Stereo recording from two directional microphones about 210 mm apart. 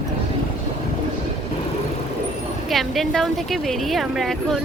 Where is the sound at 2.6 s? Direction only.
Centre (ahead or behind).